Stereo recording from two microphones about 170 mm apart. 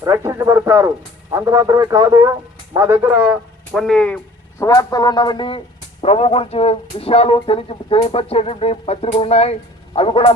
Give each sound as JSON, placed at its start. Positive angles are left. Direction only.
{"t": 0.0, "sound": "speech", "side_deg": -15}
{"t": 3.7, "sound": "speech", "side_deg": 5}
{"t": 4.6, "sound": "speech", "side_deg": 20}